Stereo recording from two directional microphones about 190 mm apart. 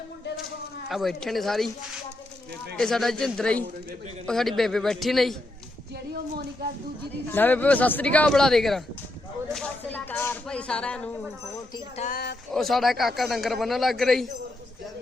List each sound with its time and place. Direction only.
0.9 s speech: centre (ahead or behind)
2.7 s speech: centre (ahead or behind)
7.3 s speech: 10° left (ahead or behind)
11.9 s speech: 40° left (ahead or behind)
12.5 s speech: centre (ahead or behind)